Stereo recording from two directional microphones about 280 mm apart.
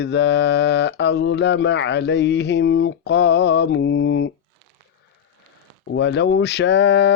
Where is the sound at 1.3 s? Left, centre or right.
Left.